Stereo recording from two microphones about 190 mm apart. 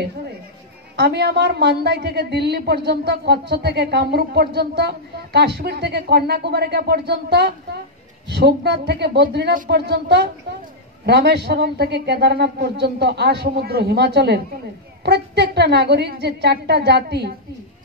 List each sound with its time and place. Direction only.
0.9 s a woman's voice: 60° right (ahead or behind)